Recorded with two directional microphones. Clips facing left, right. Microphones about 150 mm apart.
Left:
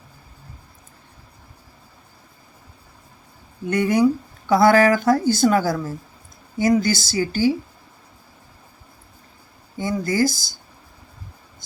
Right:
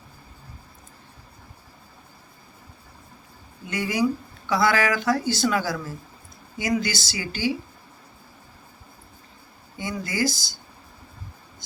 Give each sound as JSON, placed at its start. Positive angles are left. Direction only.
{"t": 3.7, "sound": "speech", "side_deg": 55}
{"t": 9.7, "sound": "speech", "side_deg": 45}